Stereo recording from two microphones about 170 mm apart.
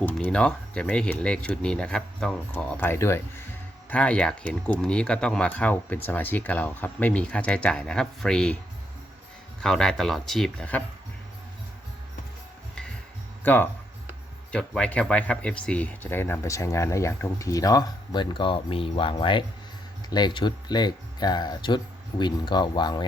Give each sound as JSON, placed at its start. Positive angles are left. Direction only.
{"t": 0.0, "sound": "speech", "side_deg": 10}
{"t": 9.6, "sound": "speech", "side_deg": 5}
{"t": 13.4, "sound": "speech", "side_deg": 10}